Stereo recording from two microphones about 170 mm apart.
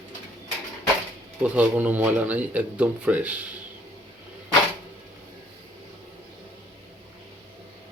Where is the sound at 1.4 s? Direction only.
10° right (ahead or behind).